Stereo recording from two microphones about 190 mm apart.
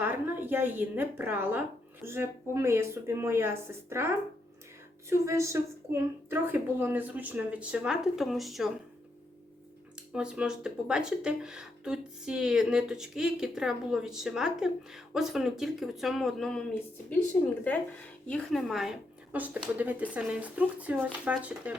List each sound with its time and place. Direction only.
0.0 s a woman's voice: 10° right (ahead or behind)
10.1 s speech: 5° right (ahead or behind)
18.3 s a woman's voice: 5° left (ahead or behind)